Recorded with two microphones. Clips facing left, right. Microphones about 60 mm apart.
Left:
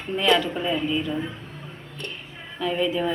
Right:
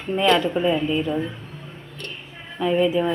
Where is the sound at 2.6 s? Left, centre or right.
Centre.